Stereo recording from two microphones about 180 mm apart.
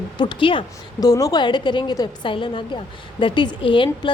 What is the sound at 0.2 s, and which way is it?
A woman's voice, 25° left (ahead or behind).